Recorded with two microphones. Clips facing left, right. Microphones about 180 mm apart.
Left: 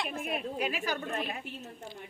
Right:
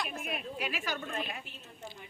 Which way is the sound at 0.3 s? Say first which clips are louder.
Left 4 dB; 40° left (ahead or behind).